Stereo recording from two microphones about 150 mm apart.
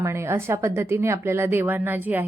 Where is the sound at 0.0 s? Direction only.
15° right (ahead or behind).